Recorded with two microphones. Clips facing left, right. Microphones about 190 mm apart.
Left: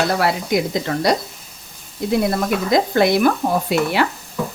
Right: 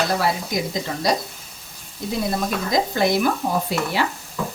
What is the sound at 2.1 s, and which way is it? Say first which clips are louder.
Speech: left 5 dB; 60° left (ahead or behind).